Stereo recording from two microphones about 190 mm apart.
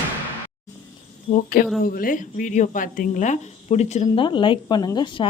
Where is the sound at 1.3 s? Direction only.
45° left (ahead or behind).